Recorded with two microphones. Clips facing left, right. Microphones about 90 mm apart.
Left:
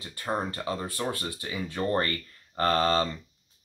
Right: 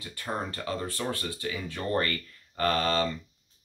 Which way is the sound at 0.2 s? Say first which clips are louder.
Left 3 dB; 25° left (ahead or behind).